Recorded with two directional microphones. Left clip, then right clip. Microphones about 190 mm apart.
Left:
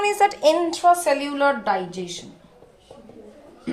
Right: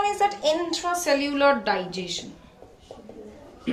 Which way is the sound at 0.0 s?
60° left (ahead or behind).